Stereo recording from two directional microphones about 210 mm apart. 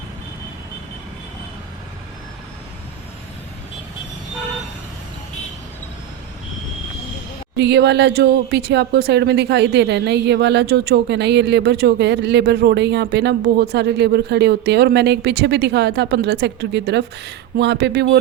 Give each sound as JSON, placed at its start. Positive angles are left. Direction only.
{"t": 7.5, "sound": "speech", "side_deg": -55}